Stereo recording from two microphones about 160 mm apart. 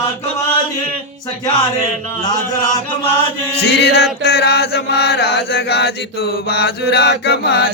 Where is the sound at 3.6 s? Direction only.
90° left.